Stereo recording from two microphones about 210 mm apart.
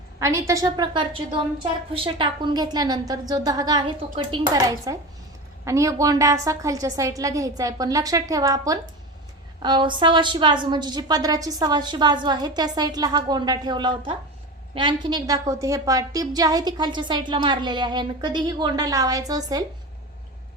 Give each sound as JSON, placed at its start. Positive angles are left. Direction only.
{"t": 0.2, "sound": "a woman's voice", "side_deg": -15}